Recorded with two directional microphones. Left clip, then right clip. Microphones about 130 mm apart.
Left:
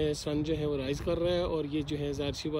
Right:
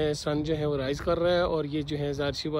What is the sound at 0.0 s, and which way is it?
Speech, 20° left (ahead or behind).